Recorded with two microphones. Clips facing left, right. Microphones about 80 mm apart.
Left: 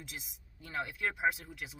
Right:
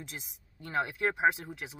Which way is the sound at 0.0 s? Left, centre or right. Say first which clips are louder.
Right 3 dB; right.